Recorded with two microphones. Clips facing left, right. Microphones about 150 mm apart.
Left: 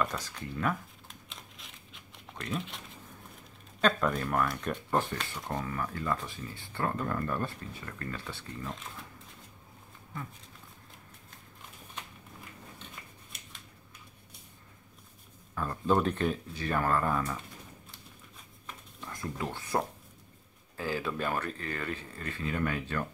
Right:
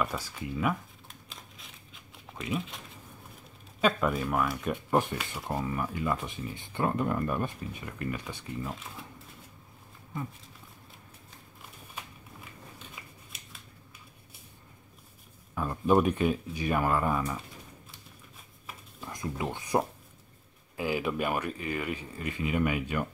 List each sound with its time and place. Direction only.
0.0 s crumpling: 5° right (ahead or behind)
3.8 s speech: 5° right (ahead or behind)
12.7 s scissors: 5° right (ahead or behind)
15.5 s speech: 15° right (ahead or behind)
19.0 s speech: 15° right (ahead or behind)